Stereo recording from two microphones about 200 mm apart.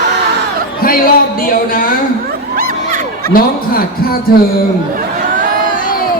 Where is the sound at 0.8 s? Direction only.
45° left (ahead or behind).